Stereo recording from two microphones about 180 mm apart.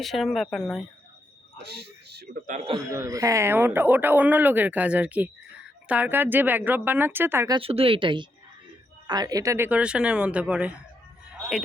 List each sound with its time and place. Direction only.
0.0 s speech: centre (ahead or behind)
1.6 s a sound: 65° right (ahead or behind)
2.8 s speech: 15° right (ahead or behind)
7.5 s speech: 30° right (ahead or behind); by 10.7 s 5° right (ahead or behind)